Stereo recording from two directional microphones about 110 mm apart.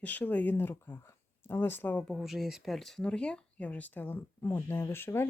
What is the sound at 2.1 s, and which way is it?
Speech, centre (ahead or behind).